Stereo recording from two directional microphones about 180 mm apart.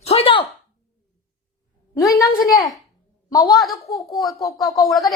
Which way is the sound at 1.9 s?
20° left (ahead or behind).